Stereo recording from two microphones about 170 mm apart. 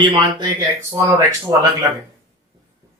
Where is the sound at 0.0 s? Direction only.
25° right (ahead or behind).